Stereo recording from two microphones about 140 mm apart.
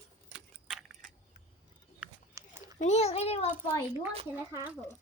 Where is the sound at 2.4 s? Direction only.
20° right (ahead or behind).